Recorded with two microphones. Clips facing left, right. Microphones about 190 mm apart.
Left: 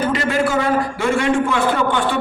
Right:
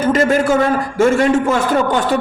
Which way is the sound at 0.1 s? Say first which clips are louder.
Right 5 dB; 45° right (ahead or behind).